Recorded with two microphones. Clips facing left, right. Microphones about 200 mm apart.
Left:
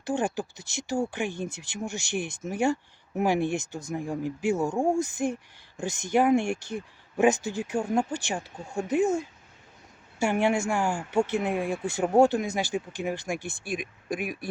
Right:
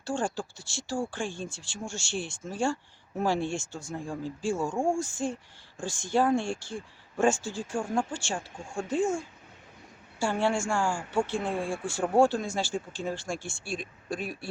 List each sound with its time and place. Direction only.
0.0 s speech: 20° left (ahead or behind)
10.2 s speech: 20° left (ahead or behind)